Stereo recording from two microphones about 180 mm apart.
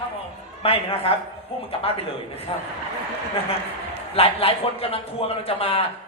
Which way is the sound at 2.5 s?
30° left (ahead or behind).